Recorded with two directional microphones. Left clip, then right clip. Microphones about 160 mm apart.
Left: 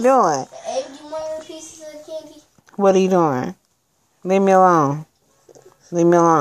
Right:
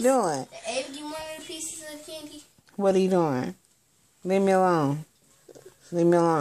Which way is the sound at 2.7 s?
20° left (ahead or behind).